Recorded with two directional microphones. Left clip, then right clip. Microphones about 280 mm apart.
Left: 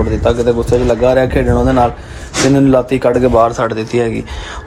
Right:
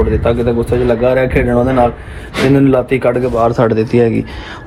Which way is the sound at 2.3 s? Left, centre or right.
Centre.